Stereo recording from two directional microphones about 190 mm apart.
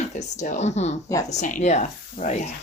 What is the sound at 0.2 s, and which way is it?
Speech, 40° left (ahead or behind).